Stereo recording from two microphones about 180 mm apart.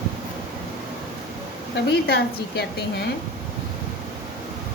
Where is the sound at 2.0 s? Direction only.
60° left (ahead or behind).